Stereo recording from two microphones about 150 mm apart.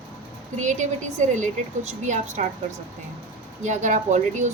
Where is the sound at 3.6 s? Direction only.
55° right (ahead or behind).